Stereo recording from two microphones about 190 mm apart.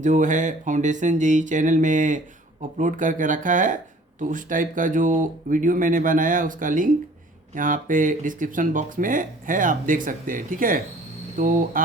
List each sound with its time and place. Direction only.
0.0 s speech: 40° right (ahead or behind)